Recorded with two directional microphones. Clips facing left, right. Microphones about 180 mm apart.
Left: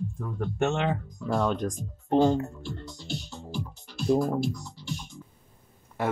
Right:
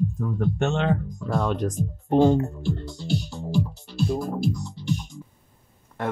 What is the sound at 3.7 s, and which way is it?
Music, 35° right (ahead or behind).